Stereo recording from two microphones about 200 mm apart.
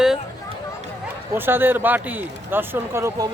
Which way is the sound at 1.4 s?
10° right (ahead or behind).